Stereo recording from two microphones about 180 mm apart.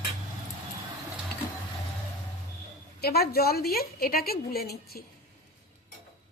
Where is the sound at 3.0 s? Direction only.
60° left (ahead or behind).